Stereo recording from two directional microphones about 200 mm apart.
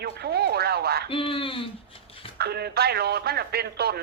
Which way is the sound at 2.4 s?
55° right (ahead or behind).